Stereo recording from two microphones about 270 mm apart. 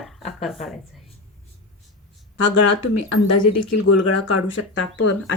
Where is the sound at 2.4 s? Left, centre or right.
Left.